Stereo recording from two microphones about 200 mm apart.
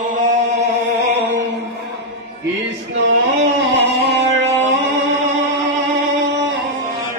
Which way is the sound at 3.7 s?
60° right (ahead or behind).